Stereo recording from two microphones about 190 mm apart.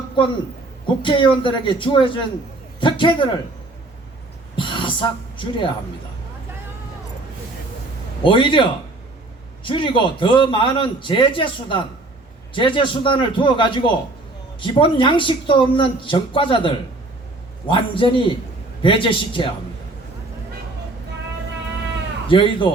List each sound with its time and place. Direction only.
0.9 s a man's voice: 25° left (ahead or behind)
4.5 s speech: 25° left (ahead or behind)
8.2 s a man's voice: 25° left (ahead or behind)
9.6 s a man's voice: 25° left (ahead or behind)
22.3 s a man's voice: 25° left (ahead or behind)